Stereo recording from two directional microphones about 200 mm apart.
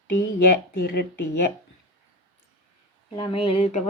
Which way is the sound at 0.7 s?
50° left (ahead or behind).